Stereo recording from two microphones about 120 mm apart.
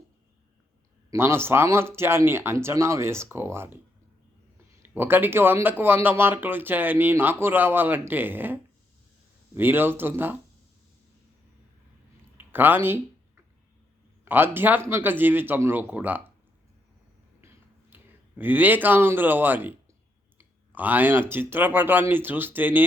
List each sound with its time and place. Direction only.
1.1 s speech: 20° right (ahead or behind)
4.8 s speech: 20° right (ahead or behind)
12.4 s speech: 15° right (ahead or behind)
14.3 s speech: 15° right (ahead or behind)
17.9 s speech: 15° right (ahead or behind)